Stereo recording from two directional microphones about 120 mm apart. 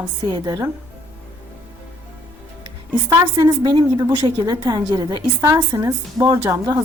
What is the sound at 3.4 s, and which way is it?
A woman's voice, 40° right (ahead or behind).